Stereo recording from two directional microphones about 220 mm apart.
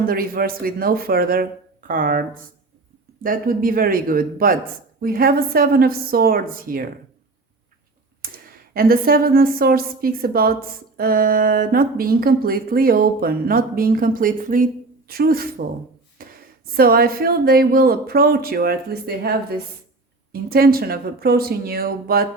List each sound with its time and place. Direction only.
0.0 s a man's voice: 40° right (ahead or behind)
8.2 s speech: 40° right (ahead or behind)
16.2 s a sound: 40° right (ahead or behind)
16.7 s speech: 45° right (ahead or behind)